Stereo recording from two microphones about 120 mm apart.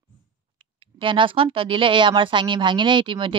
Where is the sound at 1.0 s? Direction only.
45° right (ahead or behind).